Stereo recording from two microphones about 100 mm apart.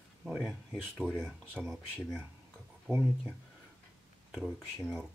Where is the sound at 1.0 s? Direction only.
10° right (ahead or behind).